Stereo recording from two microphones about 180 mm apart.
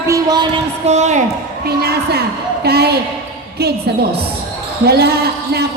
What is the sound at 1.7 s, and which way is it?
A woman's voice, 60° right (ahead or behind).